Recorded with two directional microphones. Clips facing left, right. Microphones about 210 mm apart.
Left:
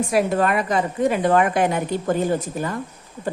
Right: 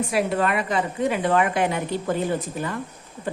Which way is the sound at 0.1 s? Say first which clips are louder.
Left 4 dB; 45° left (ahead or behind).